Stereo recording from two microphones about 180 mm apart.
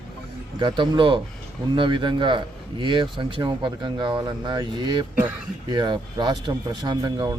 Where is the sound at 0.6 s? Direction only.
25° right (ahead or behind).